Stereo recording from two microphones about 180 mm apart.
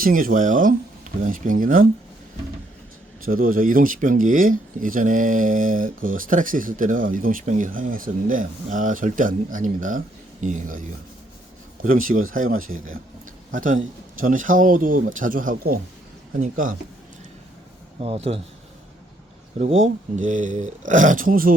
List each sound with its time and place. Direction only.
0.0 s speech: 50° right (ahead or behind)
3.2 s speech: 50° right (ahead or behind)
18.0 s a man's voice: 35° right (ahead or behind)
19.5 s speech: 40° right (ahead or behind)